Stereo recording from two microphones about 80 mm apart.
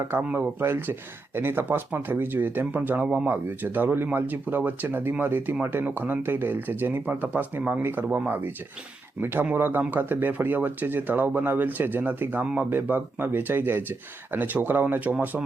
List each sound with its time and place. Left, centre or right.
0.3 s speech: right